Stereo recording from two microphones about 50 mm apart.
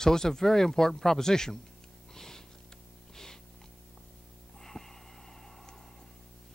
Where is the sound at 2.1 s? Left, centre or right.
Centre.